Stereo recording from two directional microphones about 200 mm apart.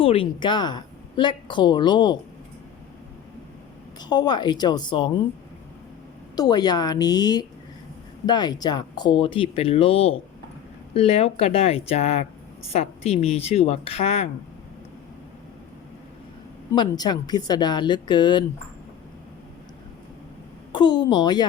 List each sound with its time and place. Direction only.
0.0 s a woman's voice: 25° left (ahead or behind)
4.1 s a woman's voice: 20° left (ahead or behind)
6.3 s a woman's voice: 20° left (ahead or behind)
16.7 s a woman's voice: 20° left (ahead or behind)
20.7 s a woman's voice: 20° left (ahead or behind)